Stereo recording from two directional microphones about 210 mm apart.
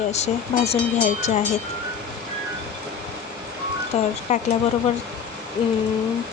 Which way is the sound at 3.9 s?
30° left (ahead or behind).